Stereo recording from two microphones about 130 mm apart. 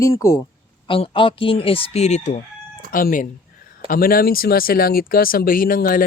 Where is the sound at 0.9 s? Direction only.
45° left (ahead or behind); by 2.4 s 60° left (ahead or behind).